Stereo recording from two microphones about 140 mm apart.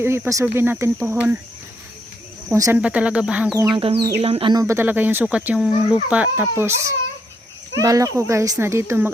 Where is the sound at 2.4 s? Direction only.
20° right (ahead or behind).